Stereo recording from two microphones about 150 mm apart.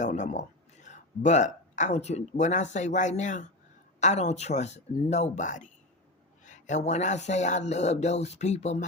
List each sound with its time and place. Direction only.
0.0 s speech: 55° left (ahead or behind)